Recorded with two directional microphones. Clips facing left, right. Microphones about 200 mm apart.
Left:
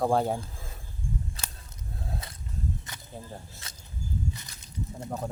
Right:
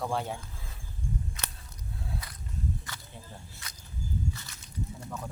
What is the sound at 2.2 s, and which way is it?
Walk, 25° left (ahead or behind).